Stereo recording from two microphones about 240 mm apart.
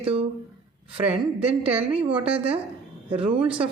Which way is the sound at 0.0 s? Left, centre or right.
Right.